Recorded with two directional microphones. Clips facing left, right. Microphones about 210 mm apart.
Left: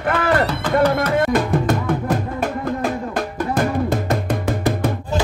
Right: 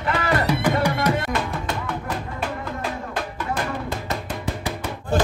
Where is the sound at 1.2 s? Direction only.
50° left (ahead or behind).